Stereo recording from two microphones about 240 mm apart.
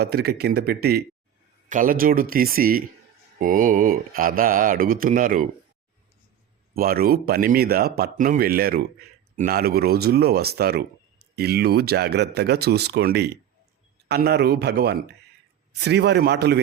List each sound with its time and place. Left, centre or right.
0.0 s speech: right
6.7 s speech: right